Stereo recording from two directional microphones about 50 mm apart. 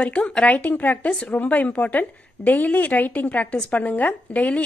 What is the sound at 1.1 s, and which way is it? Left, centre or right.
Speech, centre.